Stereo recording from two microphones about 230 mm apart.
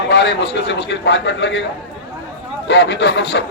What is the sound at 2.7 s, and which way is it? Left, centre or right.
Speech, left.